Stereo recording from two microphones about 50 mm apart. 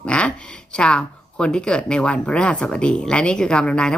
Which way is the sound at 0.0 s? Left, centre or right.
Left.